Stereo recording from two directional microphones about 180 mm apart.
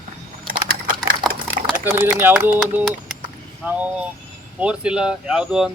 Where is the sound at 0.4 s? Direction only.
50° right (ahead or behind).